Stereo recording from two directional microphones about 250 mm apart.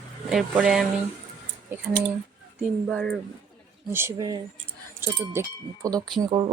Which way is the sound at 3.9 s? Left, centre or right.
Centre.